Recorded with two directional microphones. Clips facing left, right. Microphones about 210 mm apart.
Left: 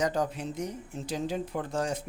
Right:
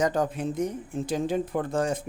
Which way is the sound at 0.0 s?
50° right (ahead or behind).